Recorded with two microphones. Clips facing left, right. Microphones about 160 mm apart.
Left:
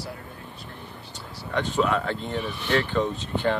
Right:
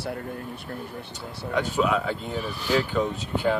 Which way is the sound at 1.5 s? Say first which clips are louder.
Even; 10° right (ahead or behind).